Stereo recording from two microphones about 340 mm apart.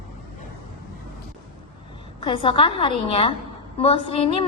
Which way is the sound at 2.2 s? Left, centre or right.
Centre.